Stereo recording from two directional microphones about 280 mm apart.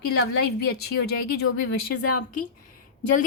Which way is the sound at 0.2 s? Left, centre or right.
Left.